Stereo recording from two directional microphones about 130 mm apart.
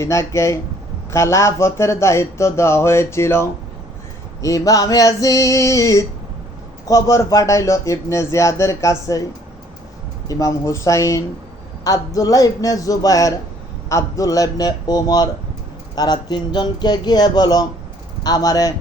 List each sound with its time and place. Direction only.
0.0 s speech: 20° left (ahead or behind)
10.2 s speech: 25° left (ahead or behind)